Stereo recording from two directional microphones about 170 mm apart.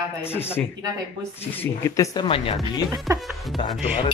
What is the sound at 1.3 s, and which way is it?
Speech, 10° left (ahead or behind).